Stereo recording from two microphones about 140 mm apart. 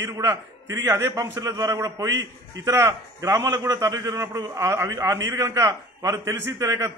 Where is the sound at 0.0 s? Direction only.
20° right (ahead or behind).